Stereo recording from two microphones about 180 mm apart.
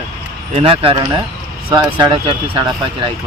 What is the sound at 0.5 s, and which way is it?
Speech, 30° right (ahead or behind).